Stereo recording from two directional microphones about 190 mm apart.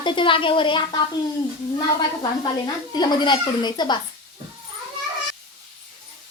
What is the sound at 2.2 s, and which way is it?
A child's voice, 20° left (ahead or behind).